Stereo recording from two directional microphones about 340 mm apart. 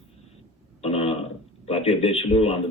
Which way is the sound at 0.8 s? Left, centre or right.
Centre.